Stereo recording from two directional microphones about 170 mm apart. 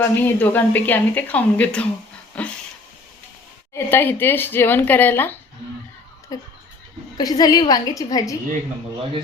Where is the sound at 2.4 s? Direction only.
5° left (ahead or behind).